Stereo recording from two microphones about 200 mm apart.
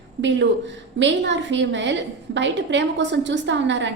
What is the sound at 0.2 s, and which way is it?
A woman's voice, 60° right (ahead or behind).